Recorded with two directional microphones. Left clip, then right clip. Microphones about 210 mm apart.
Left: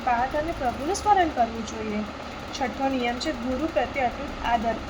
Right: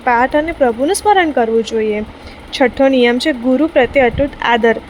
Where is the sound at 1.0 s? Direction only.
50° right (ahead or behind).